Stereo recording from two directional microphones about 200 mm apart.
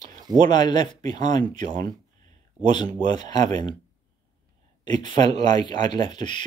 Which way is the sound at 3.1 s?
20° left (ahead or behind).